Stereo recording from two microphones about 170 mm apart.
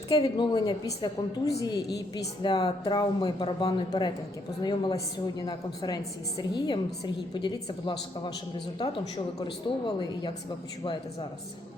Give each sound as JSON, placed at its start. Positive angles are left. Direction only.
{"t": 0.1, "sound": "a woman's voice", "side_deg": 25}
{"t": 9.4, "sound": "a woman's voice", "side_deg": 25}